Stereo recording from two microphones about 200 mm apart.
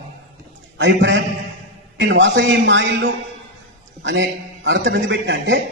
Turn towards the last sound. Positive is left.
turn(degrees=-60)  # may be behind; listen again after turning